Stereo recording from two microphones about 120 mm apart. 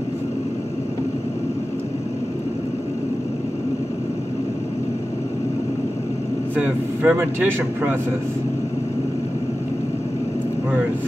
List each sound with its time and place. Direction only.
6.5 s speech: 15° right (ahead or behind)